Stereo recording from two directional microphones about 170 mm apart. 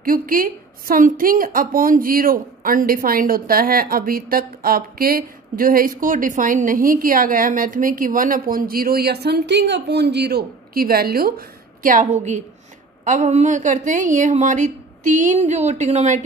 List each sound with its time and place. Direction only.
0.0 s a woman's voice: 55° right (ahead or behind)